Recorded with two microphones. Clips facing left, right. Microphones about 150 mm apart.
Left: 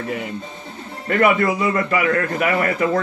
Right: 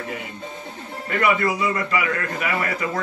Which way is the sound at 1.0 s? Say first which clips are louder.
Left 4 dB; 50° left (ahead or behind).